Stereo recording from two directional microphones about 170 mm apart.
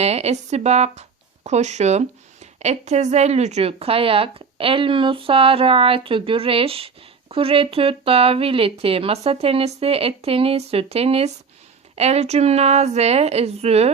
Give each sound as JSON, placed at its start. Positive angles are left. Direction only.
{"t": 0.0, "sound": "a woman's voice", "side_deg": -40}